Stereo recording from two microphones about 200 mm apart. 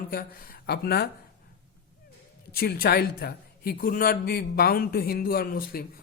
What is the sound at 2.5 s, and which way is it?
A man's voice, 50° left (ahead or behind).